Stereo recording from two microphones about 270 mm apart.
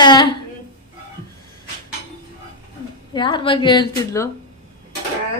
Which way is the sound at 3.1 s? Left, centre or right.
Centre.